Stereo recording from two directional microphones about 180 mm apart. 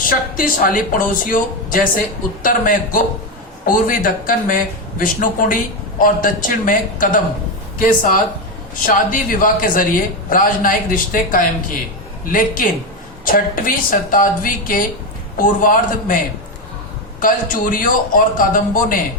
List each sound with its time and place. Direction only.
0.1 s speech: 50° left (ahead or behind)
17.2 s speech: 50° left (ahead or behind)